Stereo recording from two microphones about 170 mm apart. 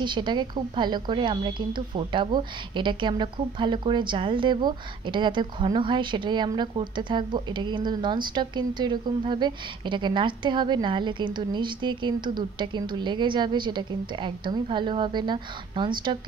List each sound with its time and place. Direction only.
0.0 s a woman's voice: 25° right (ahead or behind)